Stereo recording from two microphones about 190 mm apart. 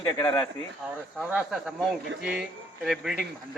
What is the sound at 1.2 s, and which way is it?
Speech, 5° right (ahead or behind).